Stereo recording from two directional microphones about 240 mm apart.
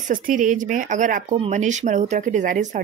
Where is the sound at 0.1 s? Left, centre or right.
Right.